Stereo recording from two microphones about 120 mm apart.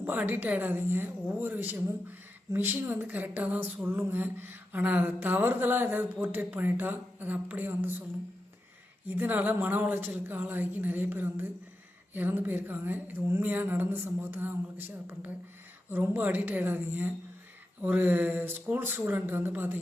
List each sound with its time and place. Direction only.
0.0 s a woman's voice: 15° right (ahead or behind)
9.0 s a woman's voice: 15° right (ahead or behind)